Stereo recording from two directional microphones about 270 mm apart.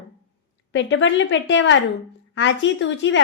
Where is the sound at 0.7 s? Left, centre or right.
Left.